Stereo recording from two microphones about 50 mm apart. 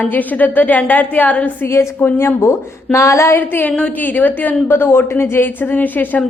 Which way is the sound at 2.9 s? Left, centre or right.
Left.